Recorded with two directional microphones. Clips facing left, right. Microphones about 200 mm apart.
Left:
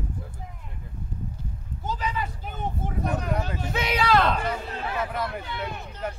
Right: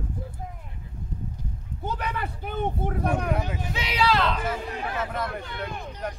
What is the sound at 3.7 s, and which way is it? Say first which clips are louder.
Speech: left 2 dB; 50° left (ahead or behind).